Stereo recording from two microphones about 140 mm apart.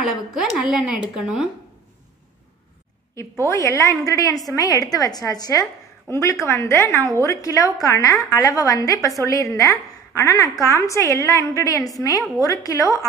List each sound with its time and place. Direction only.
0.0 s a woman's voice: centre (ahead or behind)
3.2 s a woman's voice: 20° left (ahead or behind)